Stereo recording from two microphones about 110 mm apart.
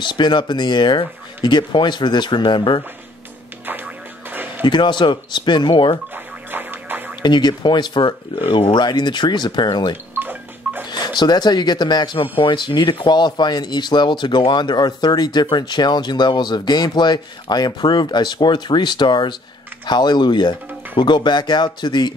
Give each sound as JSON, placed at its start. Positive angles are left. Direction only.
{"t": 0.0, "sound": "speech", "side_deg": 45}
{"t": 3.6, "sound": "music", "side_deg": -15}
{"t": 4.6, "sound": "speech", "side_deg": 45}
{"t": 6.5, "sound": "music", "side_deg": -15}
{"t": 7.2, "sound": "speech", "side_deg": 40}
{"t": 10.1, "sound": "a sound", "side_deg": -15}
{"t": 10.9, "sound": "speech", "side_deg": 40}